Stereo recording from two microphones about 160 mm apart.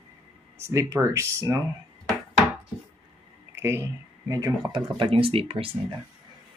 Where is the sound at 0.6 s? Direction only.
15° right (ahead or behind).